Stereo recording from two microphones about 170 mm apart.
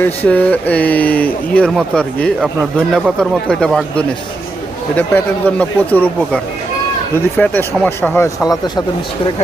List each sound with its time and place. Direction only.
0.0 s speech: 10° left (ahead or behind)
7.2 s speech: 10° left (ahead or behind)
8.4 s speech: 25° left (ahead or behind)